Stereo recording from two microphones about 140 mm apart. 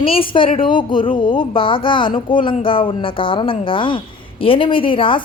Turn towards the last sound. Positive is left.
turn(degrees=40)  # may be behind; listen again after turning